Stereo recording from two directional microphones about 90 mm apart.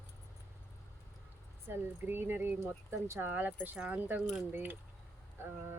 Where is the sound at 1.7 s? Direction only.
25° right (ahead or behind).